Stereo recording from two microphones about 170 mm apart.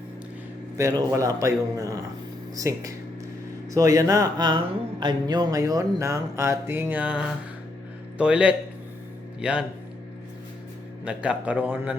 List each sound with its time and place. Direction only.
0.8 s a man's voice: 20° right (ahead or behind)
11.0 s a man's voice: 5° right (ahead or behind)